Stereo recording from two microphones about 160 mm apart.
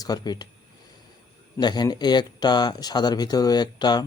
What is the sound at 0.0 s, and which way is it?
Speech, 25° left (ahead or behind).